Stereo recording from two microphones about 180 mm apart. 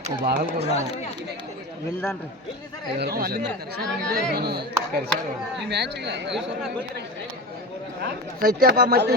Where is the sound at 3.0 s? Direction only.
60° right (ahead or behind).